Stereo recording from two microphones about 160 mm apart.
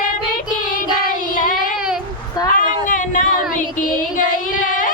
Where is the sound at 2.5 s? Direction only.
55° left (ahead or behind).